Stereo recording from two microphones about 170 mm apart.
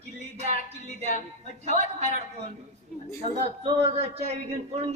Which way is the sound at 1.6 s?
40° right (ahead or behind).